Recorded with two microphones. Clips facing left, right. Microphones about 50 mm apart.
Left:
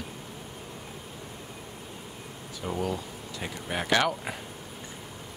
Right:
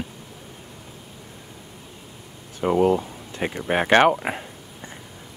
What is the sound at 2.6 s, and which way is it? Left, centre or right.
Speech, right.